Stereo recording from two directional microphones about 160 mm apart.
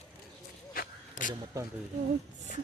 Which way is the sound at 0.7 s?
60° left (ahead or behind).